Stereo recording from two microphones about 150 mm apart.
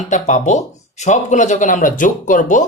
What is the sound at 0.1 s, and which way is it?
Speech, 55° left (ahead or behind).